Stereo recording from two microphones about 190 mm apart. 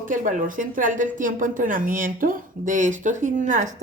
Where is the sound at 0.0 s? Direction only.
45° right (ahead or behind).